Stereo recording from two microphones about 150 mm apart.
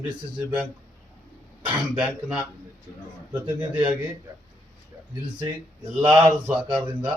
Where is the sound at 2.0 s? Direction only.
5° right (ahead or behind).